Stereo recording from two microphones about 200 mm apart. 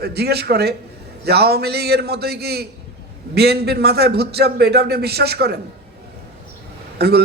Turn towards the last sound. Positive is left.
turn(degrees=-50)  # may be behind; listen again after turning